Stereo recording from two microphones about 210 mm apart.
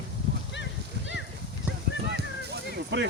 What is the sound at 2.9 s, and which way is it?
Speech, 55° right (ahead or behind).